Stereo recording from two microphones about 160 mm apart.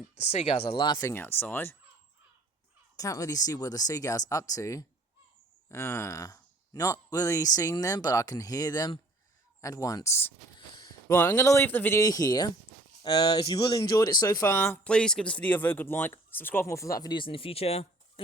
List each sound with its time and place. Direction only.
0.2 s speech: 40° left (ahead or behind)
1.1 s speech: 15° left (ahead or behind)
2.9 s speech: 20° left (ahead or behind); by 17.8 s 40° left (ahead or behind)